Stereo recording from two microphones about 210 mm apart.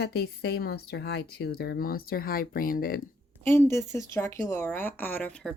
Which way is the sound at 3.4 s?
10° left (ahead or behind).